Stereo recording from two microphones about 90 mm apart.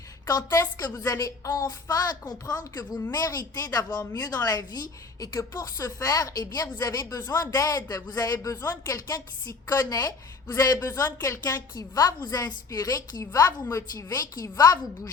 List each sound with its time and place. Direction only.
0.3 s speech: 45° left (ahead or behind)